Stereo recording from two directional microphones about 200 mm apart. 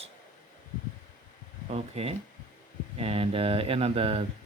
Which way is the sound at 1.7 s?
30° right (ahead or behind).